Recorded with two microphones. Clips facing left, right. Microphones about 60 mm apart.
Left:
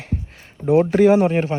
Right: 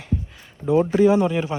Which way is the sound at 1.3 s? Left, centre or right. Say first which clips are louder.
Left 4 dB; left.